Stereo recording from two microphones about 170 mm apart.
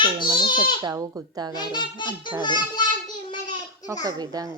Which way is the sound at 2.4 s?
25° left (ahead or behind).